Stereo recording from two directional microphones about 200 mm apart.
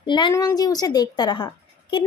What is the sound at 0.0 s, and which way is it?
A woman's voice, 25° left (ahead or behind).